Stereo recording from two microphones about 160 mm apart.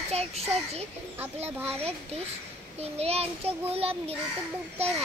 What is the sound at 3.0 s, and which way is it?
A child's voice, 40° right (ahead or behind).